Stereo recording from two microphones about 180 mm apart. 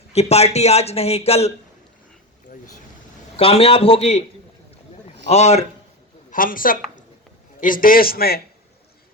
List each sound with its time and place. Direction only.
0.1 s a man's voice: 35° left (ahead or behind)
3.3 s a man's voice: 35° left (ahead or behind)
5.3 s a man's voice: 35° left (ahead or behind)
6.3 s a man's voice: 50° left (ahead or behind)